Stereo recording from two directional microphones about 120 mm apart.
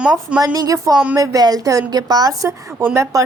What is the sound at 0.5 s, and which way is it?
A woman's voice, 30° right (ahead or behind).